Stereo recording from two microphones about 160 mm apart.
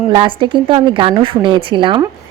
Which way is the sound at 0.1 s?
30° right (ahead or behind).